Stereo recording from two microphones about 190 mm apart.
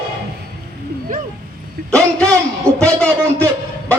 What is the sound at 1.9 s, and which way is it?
A man's voice, 5° left (ahead or behind).